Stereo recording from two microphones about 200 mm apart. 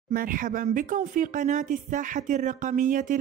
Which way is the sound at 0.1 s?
45° right (ahead or behind).